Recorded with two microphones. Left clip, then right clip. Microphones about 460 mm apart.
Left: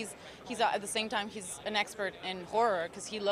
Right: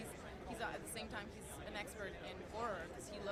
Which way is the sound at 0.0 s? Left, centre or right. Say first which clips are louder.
Left 7 dB; left.